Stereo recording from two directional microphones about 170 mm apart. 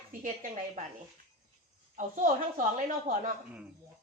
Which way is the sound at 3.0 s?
50° right (ahead or behind).